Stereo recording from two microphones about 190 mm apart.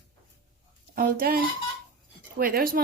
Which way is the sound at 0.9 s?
50° right (ahead or behind).